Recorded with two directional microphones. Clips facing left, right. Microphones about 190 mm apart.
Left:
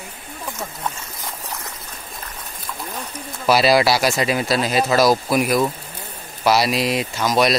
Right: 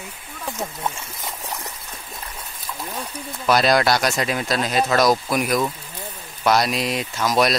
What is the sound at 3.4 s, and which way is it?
Speech, 5° left (ahead or behind).